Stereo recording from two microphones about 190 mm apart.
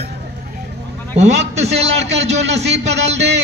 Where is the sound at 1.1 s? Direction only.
35° right (ahead or behind).